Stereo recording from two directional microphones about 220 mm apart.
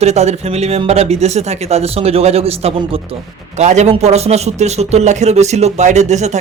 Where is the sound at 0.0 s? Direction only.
30° right (ahead or behind).